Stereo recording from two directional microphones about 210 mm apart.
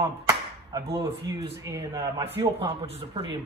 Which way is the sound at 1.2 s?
15° right (ahead or behind).